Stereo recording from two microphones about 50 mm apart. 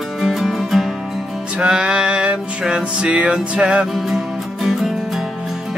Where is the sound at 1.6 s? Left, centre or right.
Centre.